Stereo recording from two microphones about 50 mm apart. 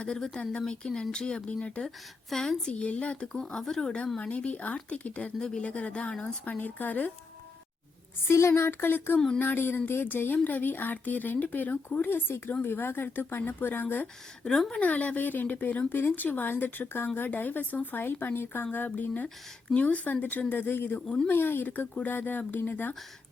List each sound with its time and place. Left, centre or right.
0.0 s speech: centre
2.3 s speech: centre
4.2 s speech: left
8.3 s speech: left
12.3 s speech: left
14.4 s speech: centre
14.8 s speech: left